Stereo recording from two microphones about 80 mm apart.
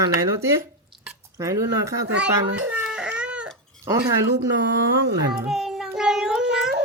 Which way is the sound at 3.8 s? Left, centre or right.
Right.